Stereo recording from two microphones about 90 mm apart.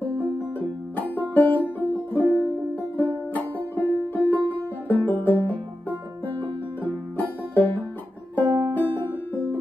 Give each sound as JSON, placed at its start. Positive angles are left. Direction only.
{"t": 0.6, "sound": "music", "side_deg": 20}
{"t": 4.8, "sound": "banjo", "side_deg": 20}
{"t": 6.8, "sound": "music", "side_deg": 20}